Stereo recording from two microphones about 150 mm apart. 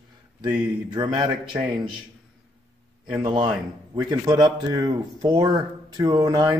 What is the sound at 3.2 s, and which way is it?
Speech, 30° right (ahead or behind).